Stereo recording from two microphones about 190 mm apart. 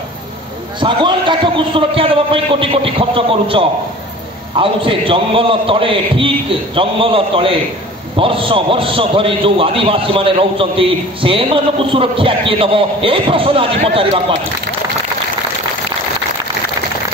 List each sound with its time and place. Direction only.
0.7 s a man's voice: 25° right (ahead or behind)